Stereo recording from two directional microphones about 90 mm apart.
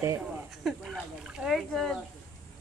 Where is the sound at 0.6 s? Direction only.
Centre (ahead or behind).